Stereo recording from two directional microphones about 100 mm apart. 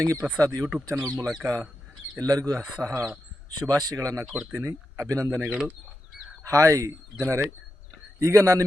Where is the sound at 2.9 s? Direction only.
15° right (ahead or behind).